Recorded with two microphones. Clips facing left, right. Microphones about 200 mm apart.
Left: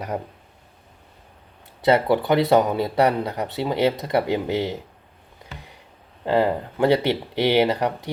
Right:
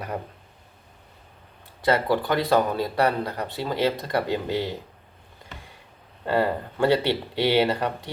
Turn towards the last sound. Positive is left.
turn(degrees=15)  # may be behind; listen again after turning